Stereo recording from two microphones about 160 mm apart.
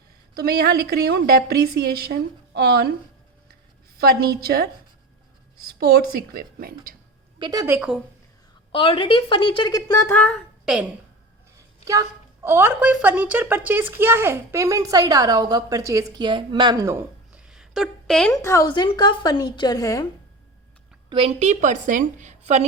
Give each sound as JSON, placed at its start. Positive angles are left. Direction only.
{"t": 0.3, "sound": "a woman's voice", "side_deg": -75}
{"t": 3.9, "sound": "a woman's voice", "side_deg": -70}
{"t": 5.6, "sound": "a woman's voice", "side_deg": -70}
{"t": 7.3, "sound": "a woman's voice", "side_deg": -30}
{"t": 7.8, "sound": "speech", "side_deg": -5}
{"t": 8.7, "sound": "a woman's voice", "side_deg": 35}
{"t": 10.3, "sound": "a sound", "side_deg": -5}
{"t": 11.9, "sound": "a woman's voice", "side_deg": -20}
{"t": 18.3, "sound": "a woman's voice", "side_deg": 20}
{"t": 21.1, "sound": "a woman's voice", "side_deg": -35}